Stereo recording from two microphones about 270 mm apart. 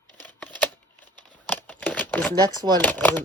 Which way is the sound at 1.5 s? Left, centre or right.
Centre.